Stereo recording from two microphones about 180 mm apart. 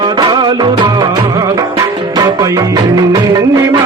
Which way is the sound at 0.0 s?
25° right (ahead or behind).